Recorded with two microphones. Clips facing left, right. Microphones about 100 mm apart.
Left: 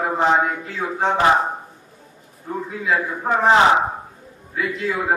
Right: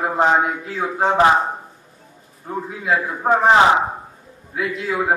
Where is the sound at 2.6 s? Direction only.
Centre (ahead or behind).